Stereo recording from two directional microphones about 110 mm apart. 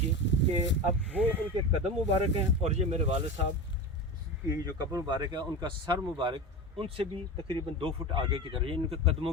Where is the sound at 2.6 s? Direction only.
70° right (ahead or behind).